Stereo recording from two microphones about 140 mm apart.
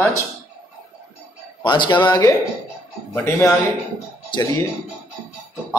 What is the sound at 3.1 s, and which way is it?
Speech, 15° left (ahead or behind).